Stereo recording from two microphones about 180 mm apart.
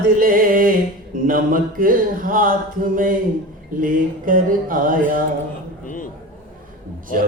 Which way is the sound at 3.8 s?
50° right (ahead or behind).